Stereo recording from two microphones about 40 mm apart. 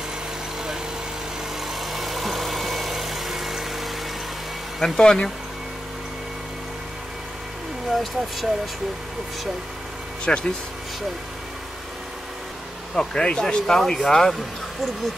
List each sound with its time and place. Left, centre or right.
1.7 s vehicle: centre
4.7 s speech: centre
7.9 s speech: centre
10.2 s speech: left
12.9 s speech: left
13.6 s speech: centre